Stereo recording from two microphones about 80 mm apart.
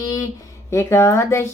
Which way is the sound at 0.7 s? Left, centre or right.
Left.